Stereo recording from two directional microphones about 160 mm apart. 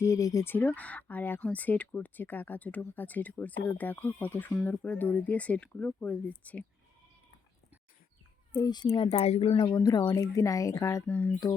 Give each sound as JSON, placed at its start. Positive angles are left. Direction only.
{"t": 0.0, "sound": "speech", "side_deg": 20}
{"t": 8.5, "sound": "speech", "side_deg": 25}
{"t": 8.9, "sound": "a woman's voice", "side_deg": 40}
{"t": 9.6, "sound": "speech", "side_deg": 20}
{"t": 11.0, "sound": "speech", "side_deg": 10}